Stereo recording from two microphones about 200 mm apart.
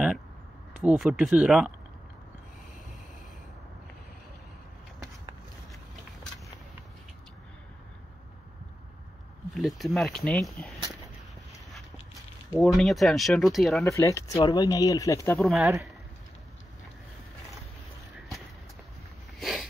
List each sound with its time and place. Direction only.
0.7 s speech: 5° right (ahead or behind)
9.5 s speech: centre (ahead or behind)
12.4 s speech: centre (ahead or behind)
13.8 s speech: 15° left (ahead or behind)
15.5 s speech: 10° right (ahead or behind)
19.4 s a sound: centre (ahead or behind)